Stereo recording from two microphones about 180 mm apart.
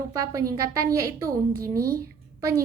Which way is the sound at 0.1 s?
20° right (ahead or behind).